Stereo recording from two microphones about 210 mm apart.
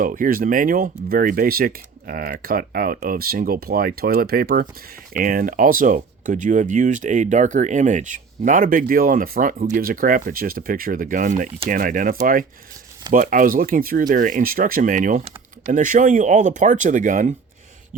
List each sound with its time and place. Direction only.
0.0 s speech: 40° right (ahead or behind)